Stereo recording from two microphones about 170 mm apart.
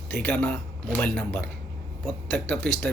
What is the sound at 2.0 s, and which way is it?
Speech, centre (ahead or behind).